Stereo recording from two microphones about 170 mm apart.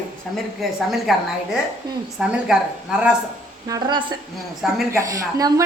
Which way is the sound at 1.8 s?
25° right (ahead or behind).